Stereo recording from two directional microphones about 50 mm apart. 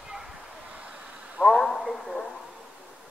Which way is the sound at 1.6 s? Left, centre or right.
Centre.